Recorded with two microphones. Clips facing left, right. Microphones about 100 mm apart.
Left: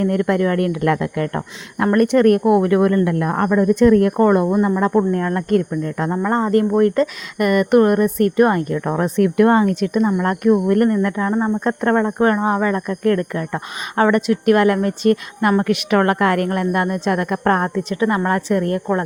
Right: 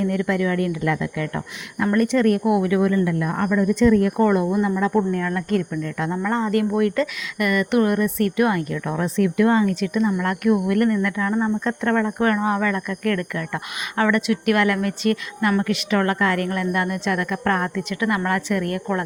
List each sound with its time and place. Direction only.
0.0 s speech: 50° left (ahead or behind)
4.4 s speech: 40° left (ahead or behind)
10.2 s speech: 30° left (ahead or behind)
11.6 s speech: 40° left (ahead or behind)